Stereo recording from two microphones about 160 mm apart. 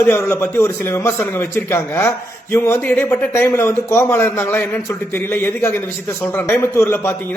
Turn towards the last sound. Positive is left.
turn(degrees=15)  # may be behind; listen again after turning